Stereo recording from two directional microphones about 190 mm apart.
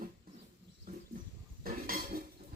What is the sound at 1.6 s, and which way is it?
Cutlery, 50° right (ahead or behind).